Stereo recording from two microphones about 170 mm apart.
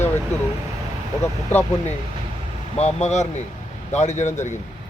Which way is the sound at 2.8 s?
40° left (ahead or behind).